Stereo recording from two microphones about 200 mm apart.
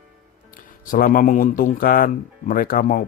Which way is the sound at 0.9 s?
45° left (ahead or behind).